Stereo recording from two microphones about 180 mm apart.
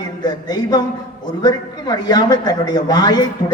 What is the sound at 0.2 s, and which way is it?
A man's voice, 20° left (ahead or behind).